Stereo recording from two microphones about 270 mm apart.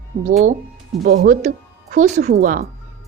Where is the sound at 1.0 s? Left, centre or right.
Right.